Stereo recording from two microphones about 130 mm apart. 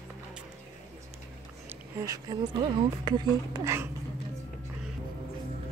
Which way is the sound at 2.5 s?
40° right (ahead or behind).